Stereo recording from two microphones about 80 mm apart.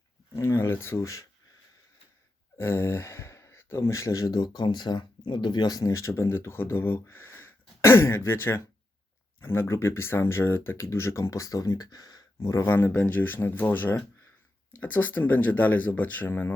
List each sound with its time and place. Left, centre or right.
0.3 s speech: left
2.6 s speech: left
12.6 s speech: left